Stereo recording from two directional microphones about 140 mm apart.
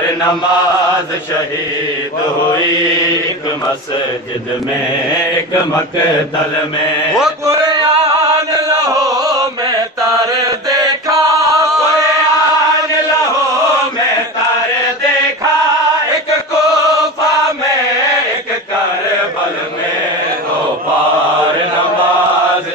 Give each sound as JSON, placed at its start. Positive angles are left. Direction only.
{"t": 7.6, "sound": "music", "side_deg": -30}
{"t": 10.7, "sound": "music", "side_deg": -25}